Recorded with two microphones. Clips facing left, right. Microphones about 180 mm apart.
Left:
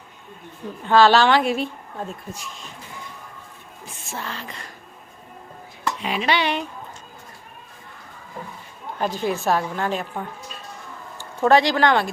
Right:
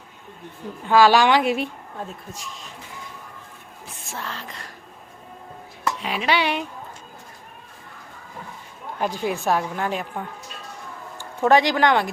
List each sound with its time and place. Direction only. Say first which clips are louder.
0.9 s a woman's voice: even; 10° right (ahead or behind)
2.3 s a sound: left 1 dB; centre (ahead or behind)
4.1 s a sound: left 1 dB; centre (ahead or behind)
5.8 s dishes: left 1 dB; centre (ahead or behind)
9.0 s a woman's voice: left 1 dB; 15° right (ahead or behind)
11.2 s speech: left 1 dB; 15° right (ahead or behind)